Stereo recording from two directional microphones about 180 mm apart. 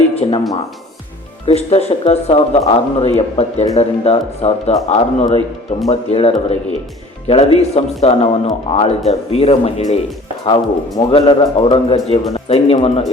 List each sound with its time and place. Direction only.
0.2 s a man's voice: 30° left (ahead or behind)
1.5 s a man's voice: 35° left (ahead or behind)